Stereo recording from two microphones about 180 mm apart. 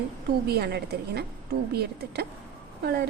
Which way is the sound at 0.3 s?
60° right (ahead or behind).